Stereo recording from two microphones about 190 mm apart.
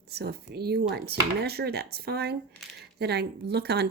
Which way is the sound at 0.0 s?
60° right (ahead or behind).